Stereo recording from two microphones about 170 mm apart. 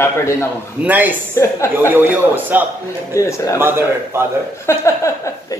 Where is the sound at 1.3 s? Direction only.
15° left (ahead or behind).